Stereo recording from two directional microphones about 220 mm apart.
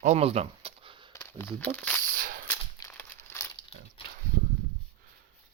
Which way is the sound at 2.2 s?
40° right (ahead or behind).